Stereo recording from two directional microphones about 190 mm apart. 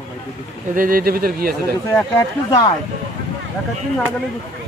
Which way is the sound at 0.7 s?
45° right (ahead or behind).